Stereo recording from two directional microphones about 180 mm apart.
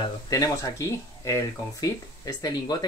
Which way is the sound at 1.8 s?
20° left (ahead or behind).